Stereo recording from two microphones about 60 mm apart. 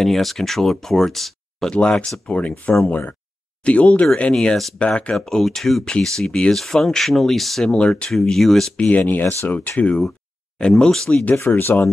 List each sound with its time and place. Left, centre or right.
0.0 s speech: centre
1.7 s speech: centre
7.6 s speech: centre
8.1 s speech: centre
8.7 s speech: left
10.6 s speech: centre
11.4 s speech: left